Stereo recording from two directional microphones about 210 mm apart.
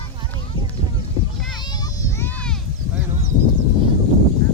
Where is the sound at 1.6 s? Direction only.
20° left (ahead or behind); by 3.0 s centre (ahead or behind).